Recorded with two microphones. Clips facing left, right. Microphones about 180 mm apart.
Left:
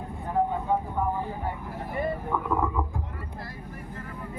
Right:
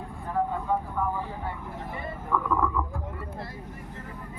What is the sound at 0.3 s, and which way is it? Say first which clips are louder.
Vehicle: left 2 dB; 20° left (ahead or behind).